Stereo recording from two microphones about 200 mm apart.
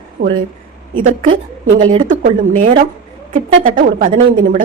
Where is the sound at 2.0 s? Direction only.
40° right (ahead or behind).